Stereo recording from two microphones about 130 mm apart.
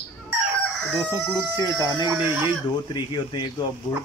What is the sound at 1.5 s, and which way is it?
Speech, 25° left (ahead or behind).